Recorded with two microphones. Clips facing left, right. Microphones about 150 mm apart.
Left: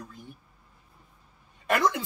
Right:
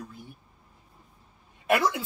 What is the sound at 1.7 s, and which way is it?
Speech, 5° right (ahead or behind).